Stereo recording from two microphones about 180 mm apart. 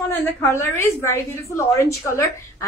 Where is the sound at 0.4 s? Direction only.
15° left (ahead or behind).